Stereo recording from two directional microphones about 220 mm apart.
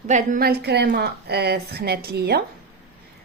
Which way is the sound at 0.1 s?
35° right (ahead or behind).